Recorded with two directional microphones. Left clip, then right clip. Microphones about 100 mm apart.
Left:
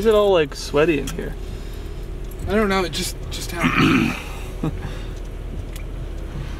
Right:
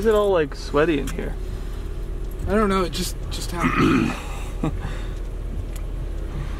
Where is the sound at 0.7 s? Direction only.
10° left (ahead or behind).